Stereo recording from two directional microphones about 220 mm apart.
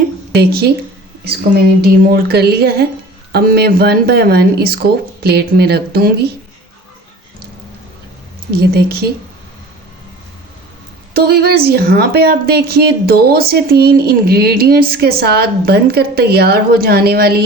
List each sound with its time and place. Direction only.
0.0 s speech: 45° right (ahead or behind)
2.0 s a woman's voice: 45° right (ahead or behind)
8.4 s a woman's voice: 45° right (ahead or behind)
11.1 s a woman's voice: 45° right (ahead or behind)